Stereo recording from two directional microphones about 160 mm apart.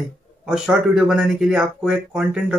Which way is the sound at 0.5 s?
5° right (ahead or behind).